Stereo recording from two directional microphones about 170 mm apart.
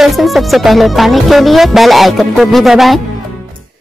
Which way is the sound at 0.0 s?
Centre (ahead or behind).